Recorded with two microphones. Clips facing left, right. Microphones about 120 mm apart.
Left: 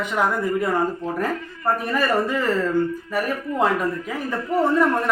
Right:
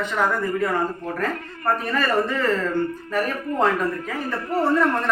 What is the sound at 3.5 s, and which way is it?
Speech, 55° right (ahead or behind).